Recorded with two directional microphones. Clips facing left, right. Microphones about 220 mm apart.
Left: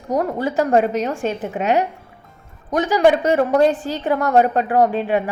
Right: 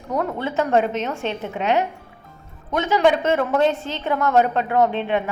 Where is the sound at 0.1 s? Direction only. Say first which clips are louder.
Left 4 dB; 40° left (ahead or behind).